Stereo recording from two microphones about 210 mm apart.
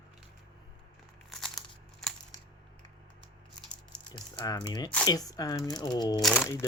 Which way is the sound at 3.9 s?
20° left (ahead or behind).